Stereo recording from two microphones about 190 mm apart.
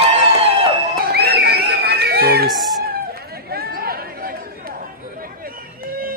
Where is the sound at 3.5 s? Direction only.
55° right (ahead or behind).